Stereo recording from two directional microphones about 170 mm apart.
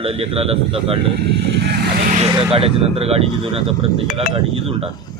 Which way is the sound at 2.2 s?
30° right (ahead or behind).